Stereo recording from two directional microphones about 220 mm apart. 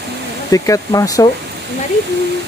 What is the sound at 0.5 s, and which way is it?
Speech, 15° left (ahead or behind).